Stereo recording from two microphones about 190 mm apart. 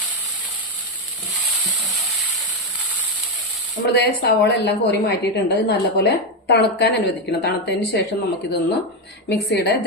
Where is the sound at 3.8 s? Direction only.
65° left (ahead or behind).